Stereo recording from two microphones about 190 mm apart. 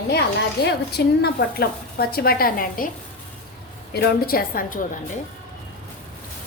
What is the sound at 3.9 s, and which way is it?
Speech, 55° left (ahead or behind).